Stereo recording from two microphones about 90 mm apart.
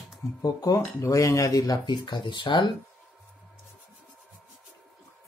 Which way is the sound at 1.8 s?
55° left (ahead or behind).